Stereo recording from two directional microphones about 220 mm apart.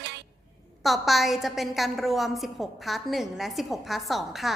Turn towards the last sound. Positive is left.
turn(degrees=0)  # may be behind; listen again after turning